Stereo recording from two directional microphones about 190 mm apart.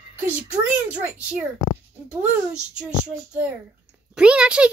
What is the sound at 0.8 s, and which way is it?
Speech, 10° right (ahead or behind).